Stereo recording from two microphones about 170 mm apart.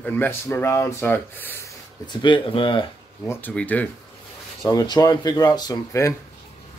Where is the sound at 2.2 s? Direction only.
30° left (ahead or behind).